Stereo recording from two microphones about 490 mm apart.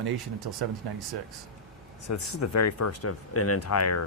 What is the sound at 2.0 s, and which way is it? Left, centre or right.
Speech, left.